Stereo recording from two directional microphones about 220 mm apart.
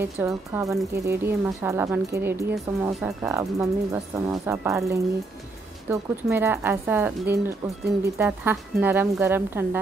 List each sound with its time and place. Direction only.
0.0 s speech: 10° right (ahead or behind)